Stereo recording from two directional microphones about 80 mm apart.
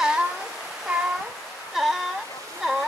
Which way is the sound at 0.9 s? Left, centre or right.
Centre.